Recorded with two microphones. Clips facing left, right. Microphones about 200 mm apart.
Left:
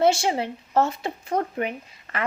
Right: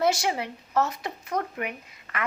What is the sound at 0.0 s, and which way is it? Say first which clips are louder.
Speech: left 4 dB; 30° left (ahead or behind).